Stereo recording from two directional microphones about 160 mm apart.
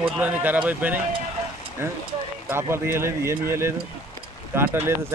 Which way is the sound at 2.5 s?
15° right (ahead or behind).